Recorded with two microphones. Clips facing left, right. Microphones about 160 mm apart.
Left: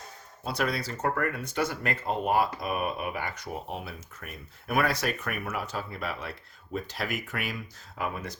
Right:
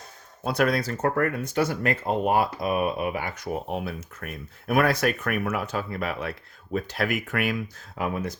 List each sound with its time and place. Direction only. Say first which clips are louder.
0.4 s speech: right 6 dB; 50° right (ahead or behind)
7.9 s speech: right 5 dB; 50° right (ahead or behind)